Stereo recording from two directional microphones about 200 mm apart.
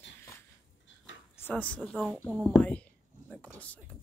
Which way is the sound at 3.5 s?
5° left (ahead or behind).